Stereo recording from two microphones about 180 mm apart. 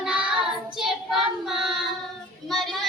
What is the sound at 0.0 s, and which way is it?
Child singing, 5° right (ahead or behind).